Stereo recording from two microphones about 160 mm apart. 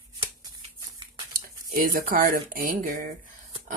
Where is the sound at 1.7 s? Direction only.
60° right (ahead or behind).